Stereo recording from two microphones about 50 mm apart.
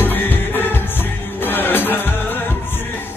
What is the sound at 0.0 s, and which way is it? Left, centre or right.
Music, left.